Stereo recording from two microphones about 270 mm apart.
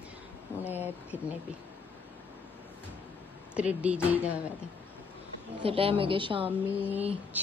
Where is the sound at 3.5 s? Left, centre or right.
Centre.